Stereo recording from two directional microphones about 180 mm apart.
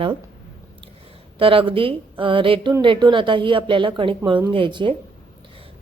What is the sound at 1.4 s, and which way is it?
A woman's voice, 30° right (ahead or behind).